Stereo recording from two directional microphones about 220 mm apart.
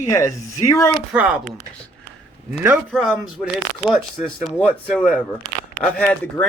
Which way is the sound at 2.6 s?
5° right (ahead or behind).